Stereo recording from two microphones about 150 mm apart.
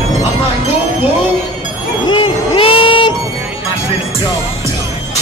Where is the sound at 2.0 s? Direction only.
35° left (ahead or behind).